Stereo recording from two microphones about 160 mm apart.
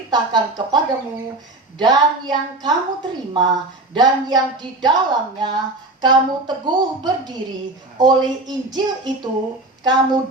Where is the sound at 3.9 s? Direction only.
25° right (ahead or behind).